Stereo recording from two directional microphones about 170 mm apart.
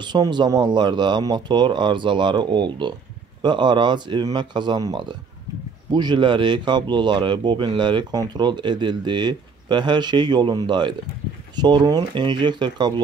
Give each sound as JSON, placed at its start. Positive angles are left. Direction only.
{"t": 0.0, "sound": "speech", "side_deg": -25}